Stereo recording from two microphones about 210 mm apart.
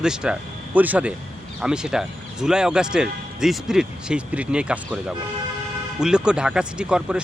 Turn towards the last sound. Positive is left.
turn(degrees=-5)  # may be behind; listen again after turning